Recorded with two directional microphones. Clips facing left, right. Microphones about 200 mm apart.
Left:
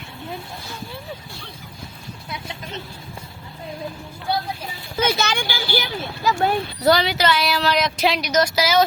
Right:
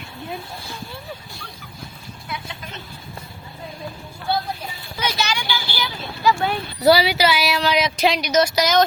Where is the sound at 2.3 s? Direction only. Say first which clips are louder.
Left 1 dB; 25° left (ahead or behind).